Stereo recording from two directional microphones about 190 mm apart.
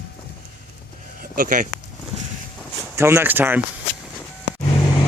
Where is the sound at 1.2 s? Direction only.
45° right (ahead or behind).